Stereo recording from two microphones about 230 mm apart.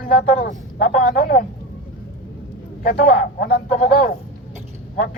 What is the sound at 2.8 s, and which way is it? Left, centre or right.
Speech, left.